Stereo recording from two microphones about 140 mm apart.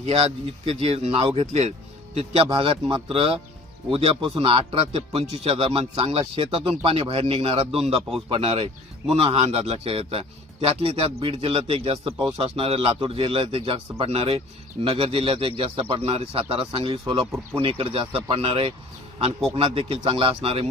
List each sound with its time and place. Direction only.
0.0 s a man's voice: 45° right (ahead or behind)